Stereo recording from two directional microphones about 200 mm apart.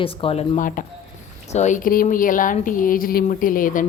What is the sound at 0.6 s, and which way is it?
Speech, 40° left (ahead or behind).